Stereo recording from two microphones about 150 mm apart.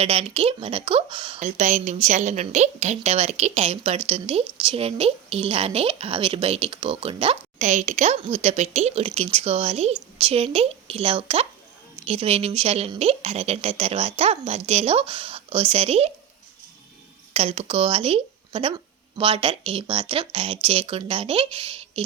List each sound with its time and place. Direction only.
0.0 s speech: 40° right (ahead or behind)
1.4 s a woman's voice: 50° right (ahead or behind)
17.3 s speech: 45° right (ahead or behind)